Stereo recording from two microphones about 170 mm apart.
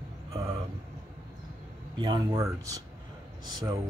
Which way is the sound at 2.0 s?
25° right (ahead or behind).